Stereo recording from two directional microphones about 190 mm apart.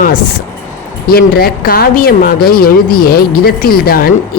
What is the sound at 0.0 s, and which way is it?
Speech, 50° left (ahead or behind).